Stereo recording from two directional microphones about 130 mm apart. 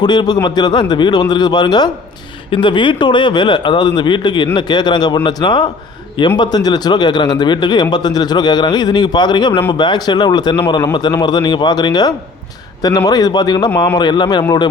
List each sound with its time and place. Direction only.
0.0 s speech: 35° left (ahead or behind)